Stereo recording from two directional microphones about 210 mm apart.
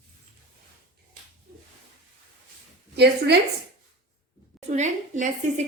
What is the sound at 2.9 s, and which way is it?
Speech, 50° right (ahead or behind).